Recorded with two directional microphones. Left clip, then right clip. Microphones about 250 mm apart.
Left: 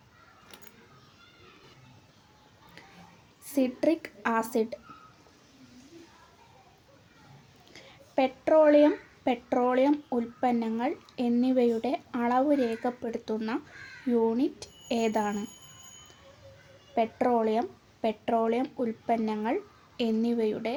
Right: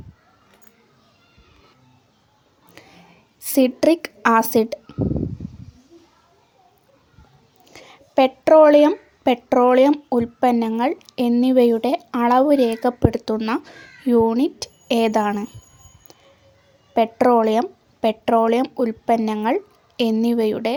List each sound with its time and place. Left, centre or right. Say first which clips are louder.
2.8 s a sound: right 6 dB; right
3.4 s a woman's voice: right 10 dB; right
7.7 s speech: right 8 dB; right
16.9 s speech: right 10 dB; right